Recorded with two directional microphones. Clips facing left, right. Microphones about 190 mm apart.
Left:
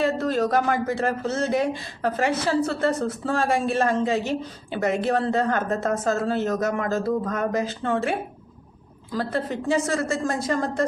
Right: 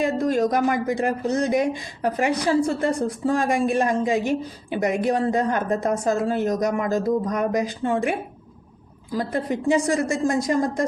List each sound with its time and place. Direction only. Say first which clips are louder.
0.0 s a woman's voice: right 2 dB; 15° right (ahead or behind)
9.1 s a woman's voice: right 2 dB; 15° right (ahead or behind)